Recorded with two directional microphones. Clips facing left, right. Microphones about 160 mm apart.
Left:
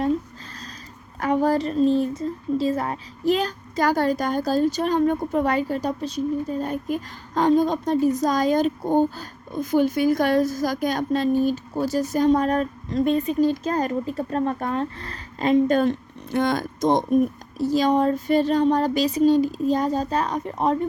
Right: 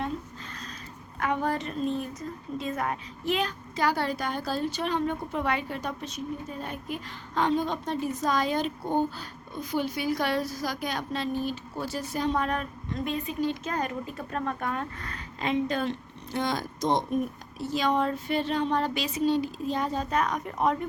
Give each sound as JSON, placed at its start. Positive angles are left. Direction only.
{"t": 1.2, "sound": "a woman's voice", "side_deg": 35}
{"t": 17.6, "sound": "a woman's voice", "side_deg": 40}